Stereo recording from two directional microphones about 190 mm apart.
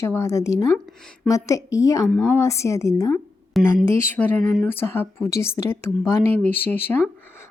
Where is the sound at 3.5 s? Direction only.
Centre (ahead or behind).